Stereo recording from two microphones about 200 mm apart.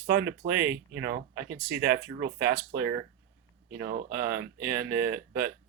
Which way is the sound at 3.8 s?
45° right (ahead or behind).